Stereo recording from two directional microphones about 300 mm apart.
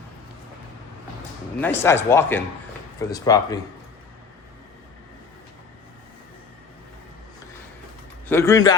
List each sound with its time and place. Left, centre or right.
1.5 s speech: centre
8.3 s speech: centre